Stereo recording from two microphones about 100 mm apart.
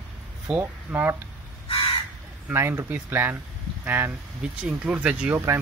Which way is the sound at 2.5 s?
25° right (ahead or behind).